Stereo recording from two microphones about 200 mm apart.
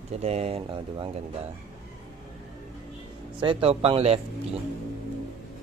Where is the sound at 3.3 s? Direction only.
30° right (ahead or behind).